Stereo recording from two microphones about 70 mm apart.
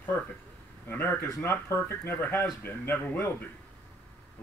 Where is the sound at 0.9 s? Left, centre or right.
Left.